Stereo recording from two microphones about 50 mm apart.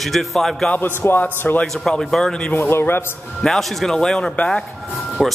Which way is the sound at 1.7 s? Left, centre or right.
Centre.